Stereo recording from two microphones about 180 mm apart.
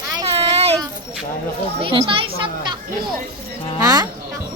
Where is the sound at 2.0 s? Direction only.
30° right (ahead or behind).